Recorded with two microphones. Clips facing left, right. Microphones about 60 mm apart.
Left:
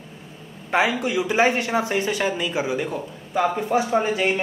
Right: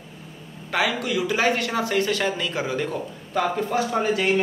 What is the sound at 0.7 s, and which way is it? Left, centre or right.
A man's voice, left.